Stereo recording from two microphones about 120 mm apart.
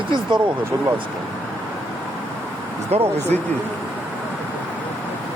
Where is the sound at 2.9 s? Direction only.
60° right (ahead or behind).